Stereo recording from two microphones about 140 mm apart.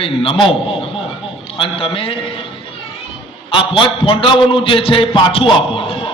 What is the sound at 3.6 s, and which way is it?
A man's voice, 40° left (ahead or behind).